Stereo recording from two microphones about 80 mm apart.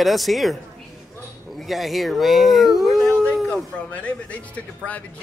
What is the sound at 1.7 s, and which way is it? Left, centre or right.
Speech, centre.